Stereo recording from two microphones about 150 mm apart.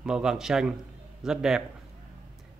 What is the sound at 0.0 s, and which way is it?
A man's voice, 5° right (ahead or behind).